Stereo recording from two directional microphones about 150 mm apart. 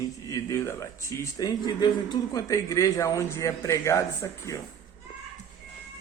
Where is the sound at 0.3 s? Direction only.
20° left (ahead or behind).